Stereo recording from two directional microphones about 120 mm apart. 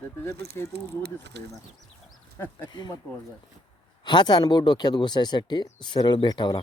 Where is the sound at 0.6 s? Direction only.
25° left (ahead or behind).